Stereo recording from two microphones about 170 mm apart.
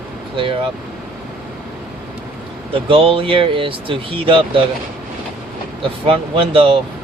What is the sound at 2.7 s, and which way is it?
Speech, 30° right (ahead or behind).